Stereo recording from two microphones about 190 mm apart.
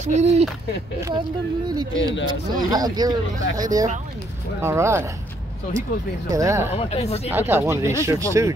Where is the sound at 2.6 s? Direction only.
20° right (ahead or behind).